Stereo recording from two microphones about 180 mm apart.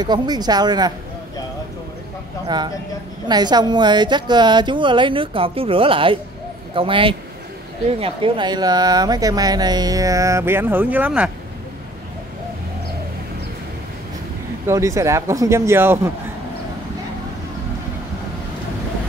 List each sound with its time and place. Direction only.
0.0 s speech: 25° right (ahead or behind)
2.4 s speech: 25° right (ahead or behind); by 11.3 s 5° right (ahead or behind)
14.7 s speech: 15° right (ahead or behind)